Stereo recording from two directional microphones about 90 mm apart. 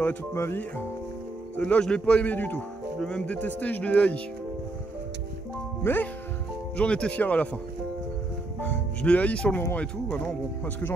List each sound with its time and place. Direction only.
0.0 s speech: 25° left (ahead or behind)
1.6 s speech: 10° left (ahead or behind)
5.8 s speech: 25° left (ahead or behind)
6.8 s speech: 15° left (ahead or behind)
8.6 s speech: 15° left (ahead or behind)